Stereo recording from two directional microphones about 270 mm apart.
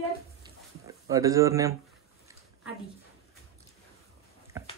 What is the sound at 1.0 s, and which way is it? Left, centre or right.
Speech, centre.